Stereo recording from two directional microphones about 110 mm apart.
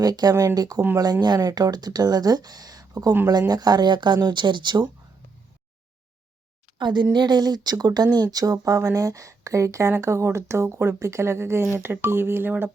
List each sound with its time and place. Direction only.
0.0 s speech: 35° right (ahead or behind)
6.7 s speech: 45° right (ahead or behind); by 12.7 s 20° right (ahead or behind)